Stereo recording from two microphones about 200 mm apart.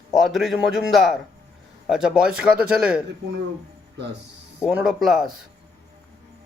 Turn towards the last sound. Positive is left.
turn(degrees=0)  # may be behind; listen again after turning